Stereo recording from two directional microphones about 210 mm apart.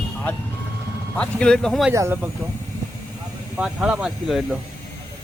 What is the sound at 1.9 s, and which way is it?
Speech, 10° right (ahead or behind).